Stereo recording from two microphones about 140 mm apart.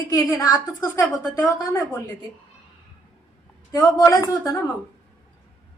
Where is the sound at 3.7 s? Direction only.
25° left (ahead or behind).